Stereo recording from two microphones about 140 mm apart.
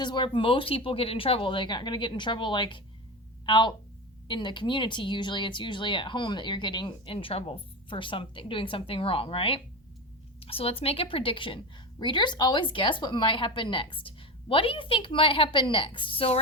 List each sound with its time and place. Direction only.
0.0 s a woman's voice: 35° left (ahead or behind)